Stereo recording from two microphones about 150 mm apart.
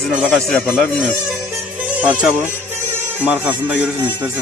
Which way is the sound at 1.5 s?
10° right (ahead or behind).